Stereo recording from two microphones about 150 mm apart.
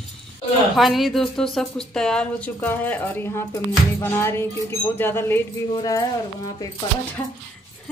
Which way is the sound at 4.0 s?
15° left (ahead or behind).